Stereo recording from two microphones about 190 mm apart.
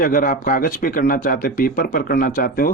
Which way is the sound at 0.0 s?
45° left (ahead or behind).